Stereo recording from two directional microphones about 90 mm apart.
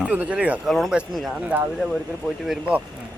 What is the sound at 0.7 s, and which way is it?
Speech, centre (ahead or behind).